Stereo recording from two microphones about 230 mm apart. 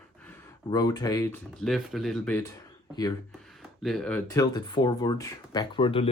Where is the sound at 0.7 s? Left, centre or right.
Centre.